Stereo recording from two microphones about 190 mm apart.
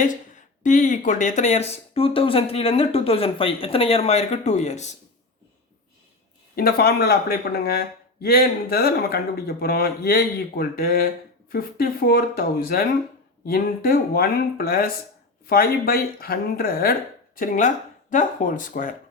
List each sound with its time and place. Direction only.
0.6 s speech: 40° left (ahead or behind)
6.6 s speech: 55° left (ahead or behind)